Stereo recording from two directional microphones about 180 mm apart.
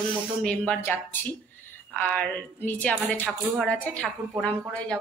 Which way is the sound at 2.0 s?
10° left (ahead or behind).